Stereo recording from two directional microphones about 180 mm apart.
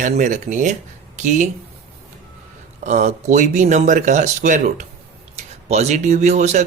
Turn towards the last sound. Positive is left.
turn(degrees=-40)  # may be behind; listen again after turning